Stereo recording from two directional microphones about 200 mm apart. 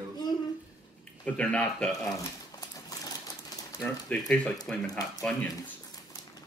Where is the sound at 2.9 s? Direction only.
20° left (ahead or behind).